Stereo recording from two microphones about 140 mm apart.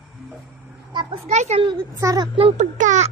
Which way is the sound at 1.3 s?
50° right (ahead or behind).